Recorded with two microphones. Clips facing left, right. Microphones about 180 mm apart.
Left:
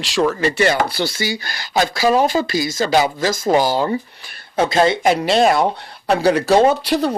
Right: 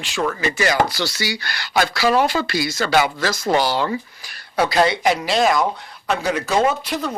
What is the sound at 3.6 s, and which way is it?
Speech, 40° left (ahead or behind).